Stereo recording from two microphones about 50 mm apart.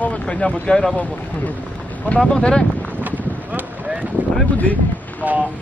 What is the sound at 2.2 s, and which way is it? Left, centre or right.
Speech, centre.